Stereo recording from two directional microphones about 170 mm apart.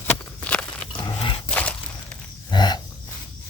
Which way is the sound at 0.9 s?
25° left (ahead or behind).